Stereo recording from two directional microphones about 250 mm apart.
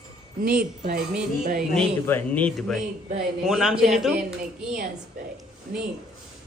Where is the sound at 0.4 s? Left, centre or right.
Right.